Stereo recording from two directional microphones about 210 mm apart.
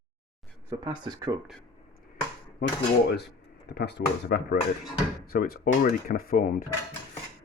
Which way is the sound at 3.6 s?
50° left (ahead or behind).